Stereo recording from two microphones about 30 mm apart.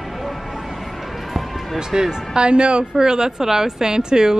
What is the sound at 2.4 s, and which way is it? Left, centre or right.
A woman's voice, right.